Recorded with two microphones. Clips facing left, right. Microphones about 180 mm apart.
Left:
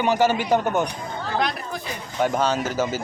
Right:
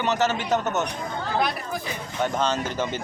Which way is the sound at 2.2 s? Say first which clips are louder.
Left 3 dB; 10° left (ahead or behind).